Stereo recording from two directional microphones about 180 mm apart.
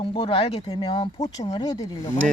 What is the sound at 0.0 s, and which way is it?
Speech, 30° left (ahead or behind).